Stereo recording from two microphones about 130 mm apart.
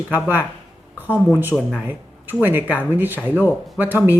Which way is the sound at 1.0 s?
15° left (ahead or behind).